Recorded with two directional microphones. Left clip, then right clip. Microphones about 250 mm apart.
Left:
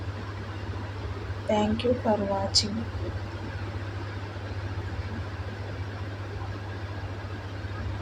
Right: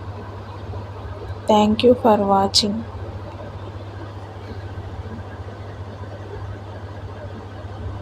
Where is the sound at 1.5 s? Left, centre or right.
Right.